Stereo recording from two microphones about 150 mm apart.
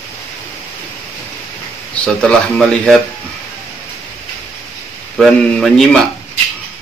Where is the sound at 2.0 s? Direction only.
10° left (ahead or behind).